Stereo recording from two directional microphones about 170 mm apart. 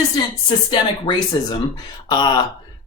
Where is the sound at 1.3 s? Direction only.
25° left (ahead or behind).